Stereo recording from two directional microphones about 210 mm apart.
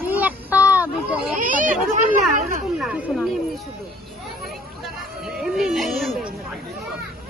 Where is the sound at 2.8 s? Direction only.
5° right (ahead or behind).